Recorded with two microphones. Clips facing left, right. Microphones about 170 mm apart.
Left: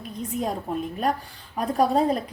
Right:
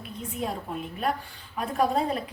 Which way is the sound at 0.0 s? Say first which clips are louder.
Left 4 dB; 40° left (ahead or behind).